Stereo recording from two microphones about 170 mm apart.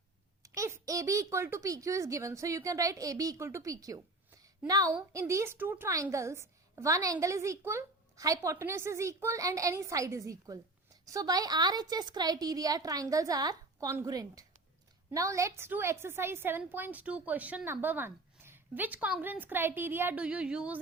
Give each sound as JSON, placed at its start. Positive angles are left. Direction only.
{"t": 0.4, "sound": "a woman's voice", "side_deg": -20}